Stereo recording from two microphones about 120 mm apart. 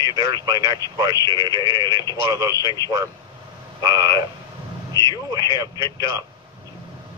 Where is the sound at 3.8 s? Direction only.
35° right (ahead or behind).